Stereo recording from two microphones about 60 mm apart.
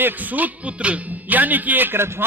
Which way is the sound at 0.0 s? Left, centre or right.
Right.